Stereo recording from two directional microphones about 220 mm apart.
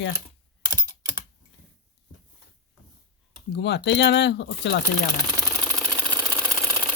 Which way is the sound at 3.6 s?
50° left (ahead or behind).